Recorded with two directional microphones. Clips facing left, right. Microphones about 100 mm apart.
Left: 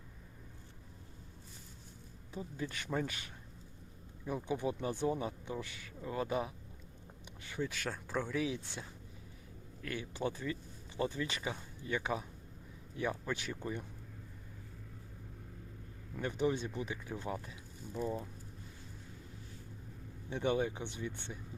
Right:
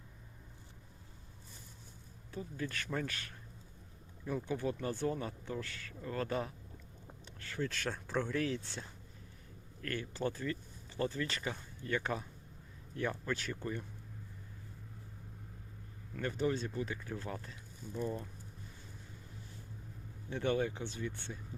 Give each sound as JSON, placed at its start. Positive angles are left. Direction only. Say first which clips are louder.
{"t": 2.3, "sound": "speech", "louder": "right 1 dB", "side_deg": 15}
{"t": 16.1, "sound": "speech", "louder": "left 1 dB", "side_deg": 15}
{"t": 20.3, "sound": "speech", "louder": "even", "side_deg": 15}